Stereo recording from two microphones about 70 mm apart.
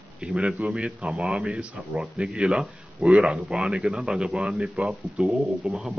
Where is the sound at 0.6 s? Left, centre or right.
Centre.